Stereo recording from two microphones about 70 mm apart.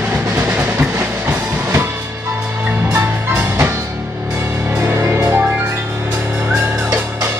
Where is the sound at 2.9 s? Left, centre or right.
Right.